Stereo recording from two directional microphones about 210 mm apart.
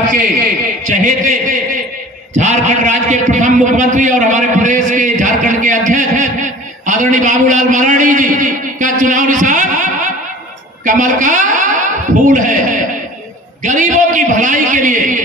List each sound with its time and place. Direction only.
0.8 s a woman's voice: 35° right (ahead or behind)
2.3 s a sound: 35° right (ahead or behind)
10.9 s a woman's voice: 35° right (ahead or behind)
12.4 s chuckle: 40° right (ahead or behind)
13.6 s a man's voice: 35° right (ahead or behind)